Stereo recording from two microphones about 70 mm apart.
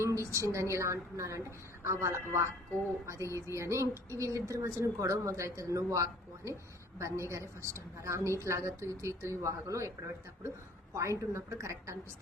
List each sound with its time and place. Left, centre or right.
0.0 s a woman's voice: right
10.9 s a woman's voice: right